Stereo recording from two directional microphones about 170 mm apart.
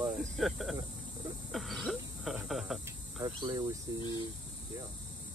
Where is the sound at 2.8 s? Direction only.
20° right (ahead or behind).